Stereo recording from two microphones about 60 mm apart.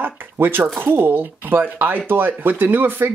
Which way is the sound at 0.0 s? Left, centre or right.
Right.